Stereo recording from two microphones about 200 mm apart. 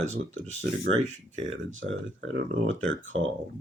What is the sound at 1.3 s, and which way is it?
Speech, 70° right (ahead or behind).